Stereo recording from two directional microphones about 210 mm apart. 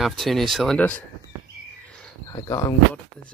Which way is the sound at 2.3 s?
20° left (ahead or behind).